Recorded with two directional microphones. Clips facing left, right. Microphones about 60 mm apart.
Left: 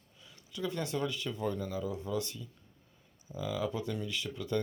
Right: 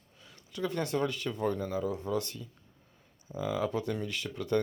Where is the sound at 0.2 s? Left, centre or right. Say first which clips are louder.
Right 3 dB; right.